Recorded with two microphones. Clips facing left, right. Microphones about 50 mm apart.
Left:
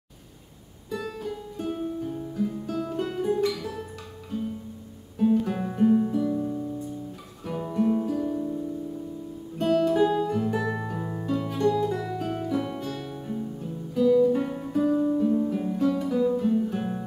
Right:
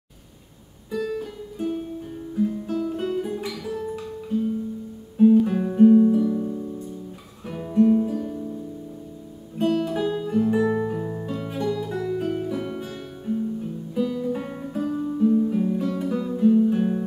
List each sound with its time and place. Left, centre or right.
0.9 s music: centre
2.3 s guitar: centre
9.6 s guitar: centre
11.0 s music: centre
11.2 s music: centre
11.7 s guitar: centre